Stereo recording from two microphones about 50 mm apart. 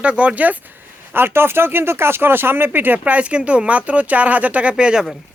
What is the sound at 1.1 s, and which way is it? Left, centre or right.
Speech, right.